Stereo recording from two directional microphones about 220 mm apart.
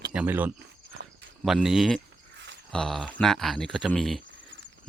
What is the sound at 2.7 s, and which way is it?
Speech, 5° left (ahead or behind).